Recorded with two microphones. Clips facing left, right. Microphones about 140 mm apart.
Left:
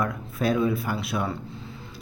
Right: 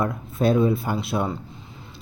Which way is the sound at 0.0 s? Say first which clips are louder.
Right 4 dB; 25° right (ahead or behind).